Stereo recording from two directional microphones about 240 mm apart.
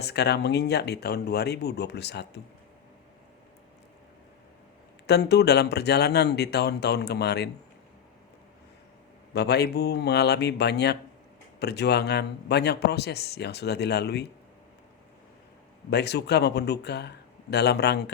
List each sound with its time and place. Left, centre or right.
0.0 s speech: left
5.0 s speech: left
9.3 s speech: left
15.9 s speech: left